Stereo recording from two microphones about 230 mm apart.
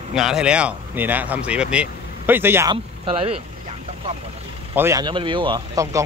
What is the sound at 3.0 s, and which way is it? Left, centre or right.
Speech, right.